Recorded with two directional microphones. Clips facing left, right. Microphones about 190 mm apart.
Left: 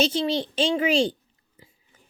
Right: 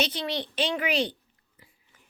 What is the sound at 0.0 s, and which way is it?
Speech, 25° left (ahead or behind).